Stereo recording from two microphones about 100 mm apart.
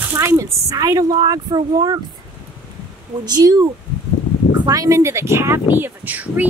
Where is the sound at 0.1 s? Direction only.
25° right (ahead or behind); by 2.0 s 45° right (ahead or behind).